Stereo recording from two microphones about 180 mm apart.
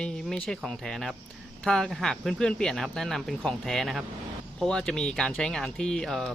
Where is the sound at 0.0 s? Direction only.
5° left (ahead or behind).